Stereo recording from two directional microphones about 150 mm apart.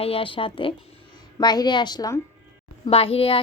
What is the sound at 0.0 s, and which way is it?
A woman's voice, 40° left (ahead or behind).